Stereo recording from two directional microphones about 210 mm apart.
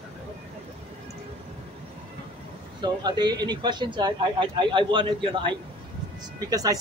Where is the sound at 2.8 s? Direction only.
20° right (ahead or behind).